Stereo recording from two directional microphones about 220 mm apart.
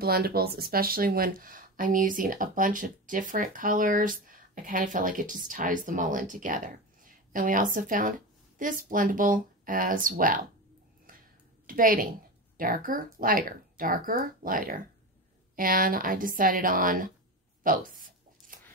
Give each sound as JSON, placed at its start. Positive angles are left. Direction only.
{"t": 0.0, "sound": "speech", "side_deg": -45}
{"t": 11.6, "sound": "a woman's voice", "side_deg": -40}
{"t": 17.6, "sound": "a sound", "side_deg": -40}